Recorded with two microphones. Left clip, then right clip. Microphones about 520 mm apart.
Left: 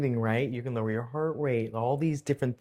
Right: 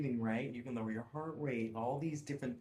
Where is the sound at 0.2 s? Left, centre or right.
Left.